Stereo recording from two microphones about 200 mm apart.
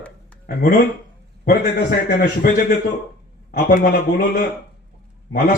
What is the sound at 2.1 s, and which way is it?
A man's voice, 45° left (ahead or behind).